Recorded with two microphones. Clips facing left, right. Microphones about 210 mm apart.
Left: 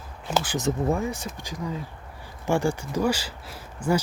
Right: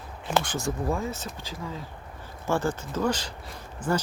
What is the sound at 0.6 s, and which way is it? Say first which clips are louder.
Speech: left 4 dB; 20° left (ahead or behind).